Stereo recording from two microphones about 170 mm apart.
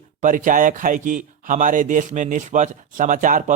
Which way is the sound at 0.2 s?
50° right (ahead or behind).